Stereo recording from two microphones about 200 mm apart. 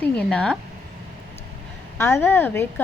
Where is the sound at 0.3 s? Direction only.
5° left (ahead or behind).